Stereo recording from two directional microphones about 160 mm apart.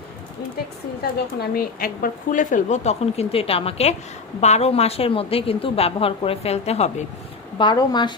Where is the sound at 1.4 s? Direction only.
65° left (ahead or behind); by 6.9 s 40° left (ahead or behind).